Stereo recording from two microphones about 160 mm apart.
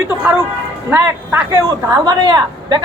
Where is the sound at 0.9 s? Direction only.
15° right (ahead or behind).